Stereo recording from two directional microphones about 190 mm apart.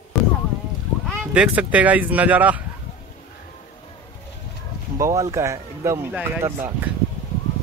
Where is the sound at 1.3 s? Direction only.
5° right (ahead or behind).